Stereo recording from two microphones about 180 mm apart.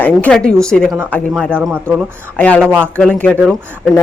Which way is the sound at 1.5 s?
10° right (ahead or behind).